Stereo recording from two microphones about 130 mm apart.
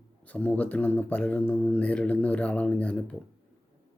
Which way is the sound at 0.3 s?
10° left (ahead or behind).